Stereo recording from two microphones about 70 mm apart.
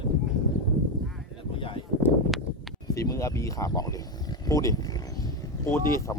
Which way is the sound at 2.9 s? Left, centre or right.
Left.